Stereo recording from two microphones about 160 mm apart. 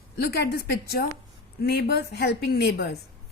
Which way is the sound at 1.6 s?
85° left.